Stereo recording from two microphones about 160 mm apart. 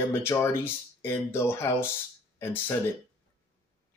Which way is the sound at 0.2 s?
15° left (ahead or behind).